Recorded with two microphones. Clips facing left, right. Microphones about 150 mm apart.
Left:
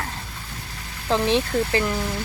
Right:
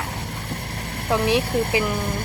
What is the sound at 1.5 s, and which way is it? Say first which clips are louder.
Speech: right 1 dB; 60° right (ahead or behind).